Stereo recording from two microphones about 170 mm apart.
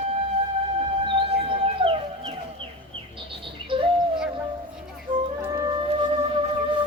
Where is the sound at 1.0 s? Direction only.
30° right (ahead or behind).